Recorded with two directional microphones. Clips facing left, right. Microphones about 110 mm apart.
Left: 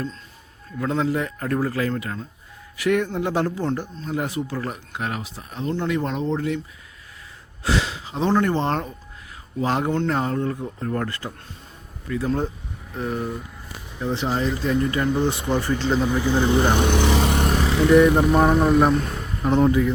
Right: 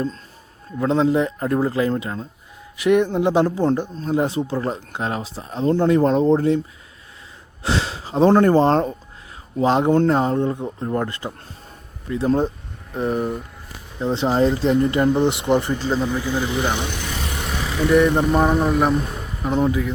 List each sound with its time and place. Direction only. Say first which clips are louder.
0.8 s speech: right 5 dB; 25° right (ahead or behind)
7.6 s a sound: right 1 dB; 30° right (ahead or behind)
8.3 s speech: right 6 dB; 40° right (ahead or behind)
9.6 s speech: right 6 dB; 25° right (ahead or behind)
15.7 s speech: even; 5° right (ahead or behind)
16.0 s speech: left 3 dB; 15° left (ahead or behind)
16.7 s vehicle: left 8 dB; 60° left (ahead or behind)
17.5 s speech: even; centre (ahead or behind)